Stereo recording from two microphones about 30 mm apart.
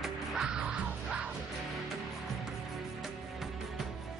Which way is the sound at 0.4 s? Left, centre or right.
Right.